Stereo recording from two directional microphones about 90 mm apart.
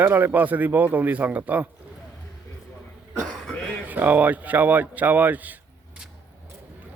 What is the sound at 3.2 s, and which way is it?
Cough, 10° left (ahead or behind).